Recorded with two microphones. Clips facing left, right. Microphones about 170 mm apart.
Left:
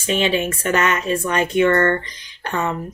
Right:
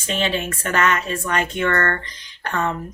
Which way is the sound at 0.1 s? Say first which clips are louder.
Left 4 dB; 10° left (ahead or behind).